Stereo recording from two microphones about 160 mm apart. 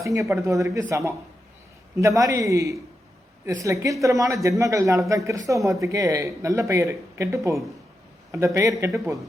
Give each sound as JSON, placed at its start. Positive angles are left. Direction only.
{"t": 0.0, "sound": "speech", "side_deg": -20}